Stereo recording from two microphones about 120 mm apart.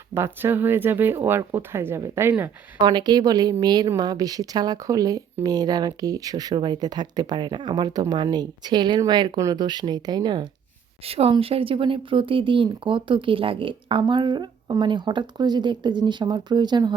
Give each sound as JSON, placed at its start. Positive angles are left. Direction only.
{"t": 0.1, "sound": "speech", "side_deg": -20}
{"t": 2.7, "sound": "speech", "side_deg": -35}
{"t": 11.0, "sound": "speech", "side_deg": -55}